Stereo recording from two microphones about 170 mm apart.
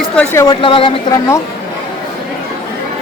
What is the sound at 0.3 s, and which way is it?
Speech, 25° left (ahead or behind).